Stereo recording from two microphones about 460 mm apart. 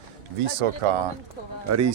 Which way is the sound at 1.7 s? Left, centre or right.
Right.